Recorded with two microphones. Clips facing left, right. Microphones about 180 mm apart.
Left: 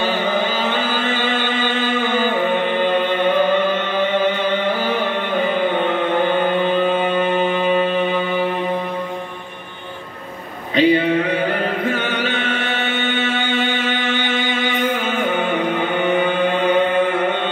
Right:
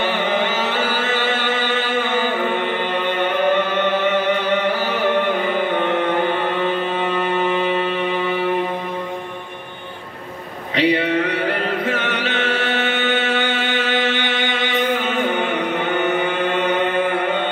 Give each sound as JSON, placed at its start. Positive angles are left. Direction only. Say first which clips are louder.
{"t": 10.8, "sound": "a sound", "louder": "left 3 dB", "side_deg": -75}
{"t": 11.9, "sound": "chant", "louder": "left 1 dB", "side_deg": -80}
{"t": 13.3, "sound": "music", "louder": "even", "side_deg": -75}